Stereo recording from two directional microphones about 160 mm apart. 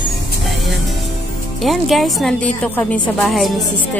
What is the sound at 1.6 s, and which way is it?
A woman's voice, centre (ahead or behind).